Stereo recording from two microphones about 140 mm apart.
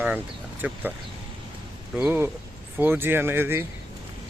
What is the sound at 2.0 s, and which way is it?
Speech, 15° right (ahead or behind).